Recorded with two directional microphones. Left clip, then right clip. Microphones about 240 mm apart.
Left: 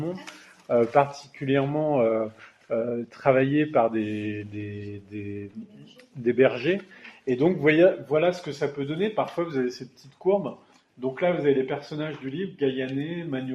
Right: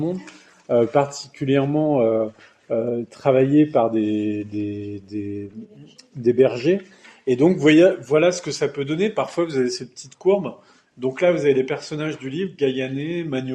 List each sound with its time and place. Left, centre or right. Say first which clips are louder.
0.7 s speech: right 3 dB; right
6.2 s speech: right 4 dB; right